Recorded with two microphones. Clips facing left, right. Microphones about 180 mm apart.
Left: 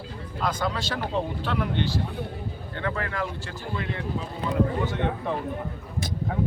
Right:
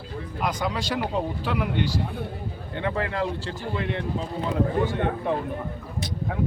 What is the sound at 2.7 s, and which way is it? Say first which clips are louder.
Speech: right 3 dB; 20° right (ahead or behind).